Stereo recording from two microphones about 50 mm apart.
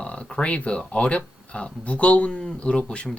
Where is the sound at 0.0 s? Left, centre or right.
Left.